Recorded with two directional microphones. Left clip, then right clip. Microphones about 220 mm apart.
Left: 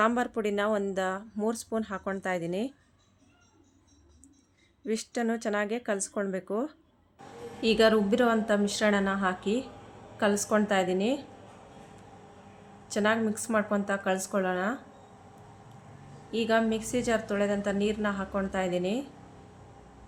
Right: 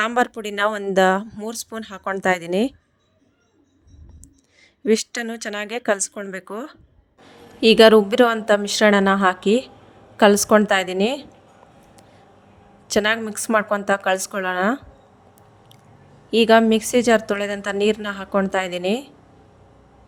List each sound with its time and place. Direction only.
0.0 s a woman's voice: 45° right (ahead or behind)
4.9 s a woman's voice: 45° right (ahead or behind)
12.9 s a woman's voice: 45° right (ahead or behind)
16.3 s a woman's voice: 45° right (ahead or behind)